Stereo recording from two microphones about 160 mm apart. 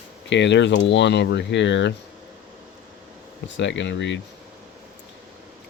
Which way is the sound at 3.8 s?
90° left.